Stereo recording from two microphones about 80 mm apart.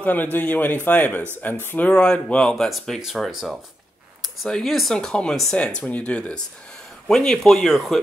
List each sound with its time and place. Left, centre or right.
0.0 s speech: left
1.9 s speech: centre
3.0 s speech: centre